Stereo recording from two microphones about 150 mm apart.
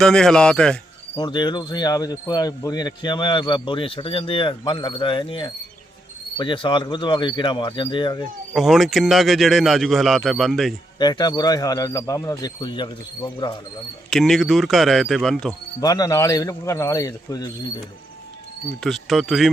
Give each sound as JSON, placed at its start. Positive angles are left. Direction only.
{"t": 0.0, "sound": "a man's voice", "side_deg": 5}
{"t": 1.1, "sound": "speech", "side_deg": 30}
{"t": 8.5, "sound": "a man's voice", "side_deg": 0}
{"t": 10.9, "sound": "speech", "side_deg": 30}
{"t": 14.1, "sound": "a man's voice", "side_deg": 0}
{"t": 15.8, "sound": "speech", "side_deg": 25}
{"t": 18.8, "sound": "a man's voice", "side_deg": 0}